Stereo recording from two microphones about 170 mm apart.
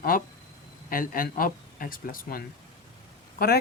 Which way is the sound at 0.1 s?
55° left (ahead or behind).